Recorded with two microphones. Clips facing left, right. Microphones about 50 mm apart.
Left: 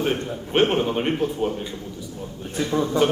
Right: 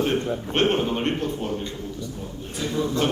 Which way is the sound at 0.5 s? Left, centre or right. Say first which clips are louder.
Left 3 dB; centre.